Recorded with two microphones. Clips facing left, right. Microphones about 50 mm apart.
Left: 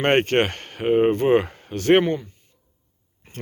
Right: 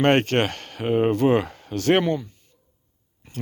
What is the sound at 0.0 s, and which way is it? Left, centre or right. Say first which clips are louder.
Speech: even; left.